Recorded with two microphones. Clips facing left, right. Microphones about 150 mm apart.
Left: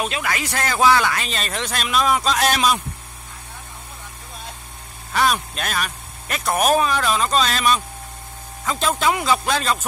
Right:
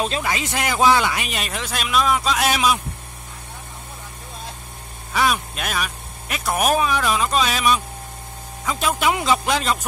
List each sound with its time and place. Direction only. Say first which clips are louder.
0.0 s speech: right 1 dB; 25° right (ahead or behind); by 2.8 s 5° right (ahead or behind)
5.1 s speech: left 1 dB; 5° right (ahead or behind)